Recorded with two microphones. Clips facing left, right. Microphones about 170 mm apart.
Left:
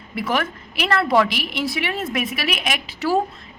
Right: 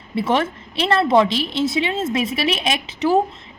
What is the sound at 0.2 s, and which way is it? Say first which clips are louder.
A woman's voice: right 4 dB; 25° right (ahead or behind).